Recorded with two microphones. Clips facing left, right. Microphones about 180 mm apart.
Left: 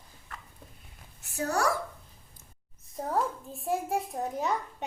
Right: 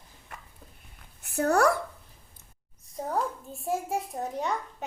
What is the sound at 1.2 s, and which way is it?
Speech, 60° right (ahead or behind).